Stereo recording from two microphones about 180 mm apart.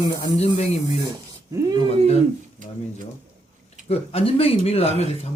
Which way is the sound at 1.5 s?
20° right (ahead or behind).